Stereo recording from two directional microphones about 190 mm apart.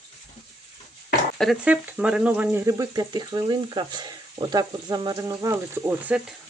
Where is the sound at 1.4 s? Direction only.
5° right (ahead or behind).